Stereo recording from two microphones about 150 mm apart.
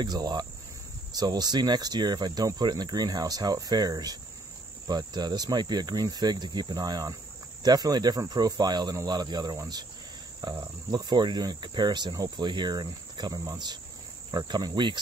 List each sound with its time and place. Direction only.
0.0 s cricket: 30° right (ahead or behind)